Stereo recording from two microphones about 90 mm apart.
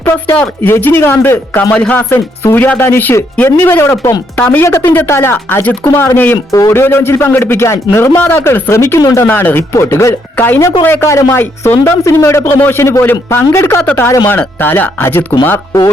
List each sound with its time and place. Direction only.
0.0 s a man's voice: 25° left (ahead or behind)
2.0 s a man's voice: 30° left (ahead or behind)
4.4 s speech: 15° left (ahead or behind)
4.6 s a man's voice: 30° left (ahead or behind)
6.5 s speech: 40° left (ahead or behind)
6.7 s a man's voice: 25° left (ahead or behind)